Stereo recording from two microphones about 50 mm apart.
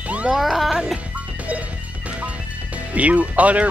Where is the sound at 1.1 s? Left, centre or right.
Right.